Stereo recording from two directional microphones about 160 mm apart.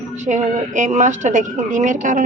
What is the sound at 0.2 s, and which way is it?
Speech, 50° right (ahead or behind).